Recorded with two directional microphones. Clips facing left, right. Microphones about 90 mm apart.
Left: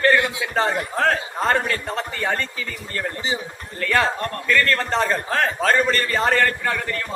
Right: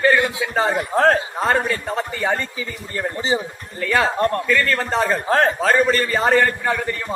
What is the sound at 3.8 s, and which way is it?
A man's voice, 10° right (ahead or behind).